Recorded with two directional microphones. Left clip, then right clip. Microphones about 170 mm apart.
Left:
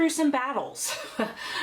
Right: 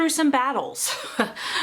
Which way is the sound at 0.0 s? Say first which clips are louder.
Right 4 dB; 30° right (ahead or behind).